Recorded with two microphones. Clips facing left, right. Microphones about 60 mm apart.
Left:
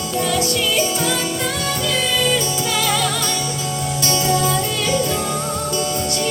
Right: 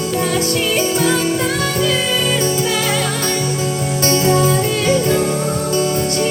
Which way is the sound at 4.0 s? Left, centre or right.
Right.